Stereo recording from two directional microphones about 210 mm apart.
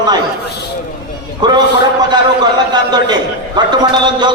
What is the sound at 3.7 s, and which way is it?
Speech, 20° right (ahead or behind).